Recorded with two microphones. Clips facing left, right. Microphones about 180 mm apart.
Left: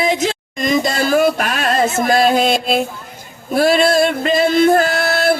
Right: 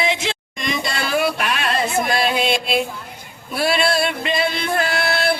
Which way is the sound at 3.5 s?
45° left (ahead or behind).